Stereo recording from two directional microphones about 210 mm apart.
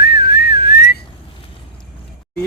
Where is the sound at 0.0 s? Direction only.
50° left (ahead or behind).